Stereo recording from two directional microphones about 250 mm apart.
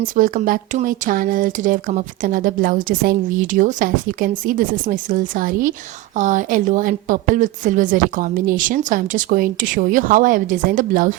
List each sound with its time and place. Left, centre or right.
0.0 s speech: right